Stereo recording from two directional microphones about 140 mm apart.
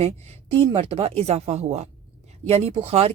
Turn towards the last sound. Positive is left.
turn(degrees=-45)  # may be behind; listen again after turning